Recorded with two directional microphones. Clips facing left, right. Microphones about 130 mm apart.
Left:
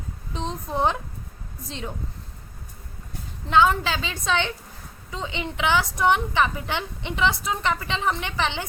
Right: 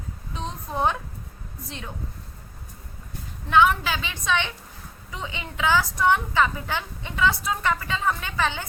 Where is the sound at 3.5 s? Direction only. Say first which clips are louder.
Even; 30° left (ahead or behind).